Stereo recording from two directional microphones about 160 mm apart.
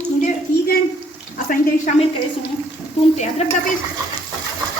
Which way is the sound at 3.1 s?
45° left (ahead or behind).